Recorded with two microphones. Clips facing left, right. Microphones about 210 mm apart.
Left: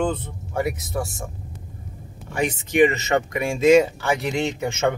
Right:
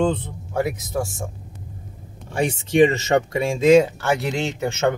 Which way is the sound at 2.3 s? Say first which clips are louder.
Right 2 dB; 30° right (ahead or behind).